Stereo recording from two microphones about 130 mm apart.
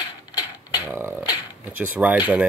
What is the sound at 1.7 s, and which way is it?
Speech, 15° right (ahead or behind).